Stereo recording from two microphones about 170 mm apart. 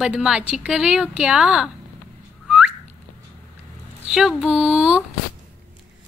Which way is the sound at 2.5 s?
5° right (ahead or behind).